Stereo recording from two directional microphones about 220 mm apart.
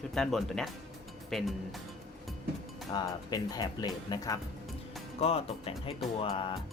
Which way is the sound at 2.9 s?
15° left (ahead or behind).